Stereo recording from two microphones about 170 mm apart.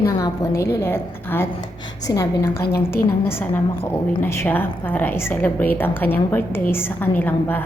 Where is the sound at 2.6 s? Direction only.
65° left (ahead or behind).